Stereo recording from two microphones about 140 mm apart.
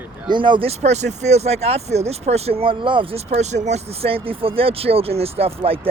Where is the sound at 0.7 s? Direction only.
55° right (ahead or behind).